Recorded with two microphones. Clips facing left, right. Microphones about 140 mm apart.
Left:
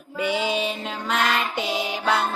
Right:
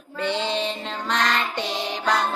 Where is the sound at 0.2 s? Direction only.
10° left (ahead or behind).